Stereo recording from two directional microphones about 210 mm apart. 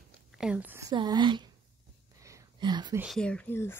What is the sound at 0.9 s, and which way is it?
Speech, 20° right (ahead or behind).